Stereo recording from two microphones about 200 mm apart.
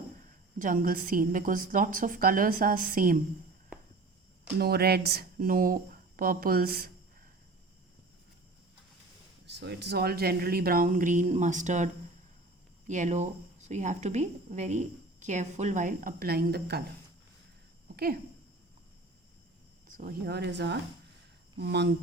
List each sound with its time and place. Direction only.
0.6 s a woman's voice: 45° right (ahead or behind)
4.5 s a woman's voice: 50° right (ahead or behind)
9.5 s a woman's voice: 60° right (ahead or behind); by 11.9 s 35° right (ahead or behind)
12.9 s speech: 35° right (ahead or behind); by 16.8 s 55° right (ahead or behind)
17.9 s a sound: 50° right (ahead or behind)
19.9 s speech: 40° right (ahead or behind)